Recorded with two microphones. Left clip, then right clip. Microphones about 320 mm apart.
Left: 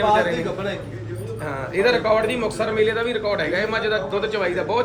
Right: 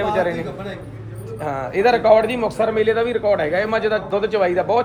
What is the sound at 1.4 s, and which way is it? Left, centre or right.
A man's voice, right.